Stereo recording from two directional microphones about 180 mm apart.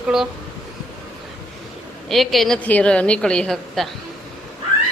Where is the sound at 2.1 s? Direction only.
Centre (ahead or behind).